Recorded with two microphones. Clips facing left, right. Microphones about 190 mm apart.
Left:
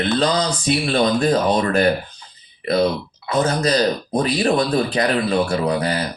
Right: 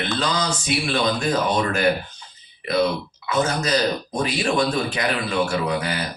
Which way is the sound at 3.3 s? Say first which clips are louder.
Left 3 dB; 35° left (ahead or behind).